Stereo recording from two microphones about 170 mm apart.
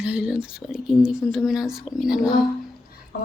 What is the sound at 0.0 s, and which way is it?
Speech, 5° right (ahead or behind).